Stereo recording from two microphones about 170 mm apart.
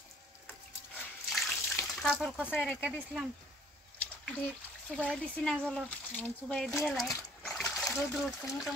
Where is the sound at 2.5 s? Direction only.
5° left (ahead or behind).